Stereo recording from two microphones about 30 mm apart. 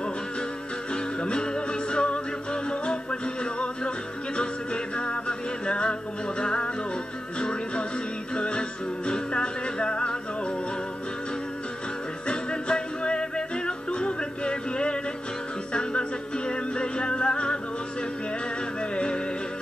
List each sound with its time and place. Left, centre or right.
0.9 s music: left
12.3 s music: left
18.8 s music: left